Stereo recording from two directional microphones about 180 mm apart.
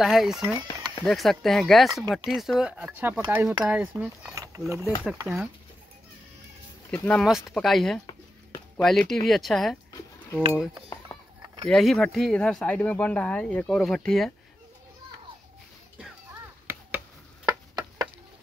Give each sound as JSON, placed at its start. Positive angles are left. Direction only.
{"t": 0.0, "sound": "speech", "side_deg": 0}
{"t": 0.6, "sound": "a sound", "side_deg": -25}
{"t": 1.0, "sound": "speech", "side_deg": 0}
{"t": 6.9, "sound": "speech", "side_deg": 5}
{"t": 8.1, "sound": "a sound", "side_deg": 15}
{"t": 8.8, "sound": "speech", "side_deg": 0}
{"t": 11.6, "sound": "speech", "side_deg": 0}
{"t": 16.7, "sound": "tick", "side_deg": -10}
{"t": 17.5, "sound": "tick-tock", "side_deg": -20}